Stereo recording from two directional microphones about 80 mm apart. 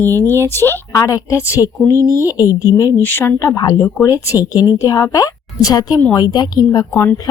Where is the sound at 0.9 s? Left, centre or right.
Left.